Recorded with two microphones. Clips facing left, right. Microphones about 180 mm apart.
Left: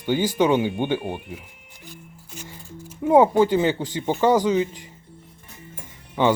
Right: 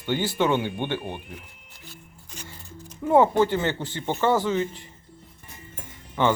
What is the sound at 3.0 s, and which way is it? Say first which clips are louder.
Speech: left 3 dB; 15° left (ahead or behind).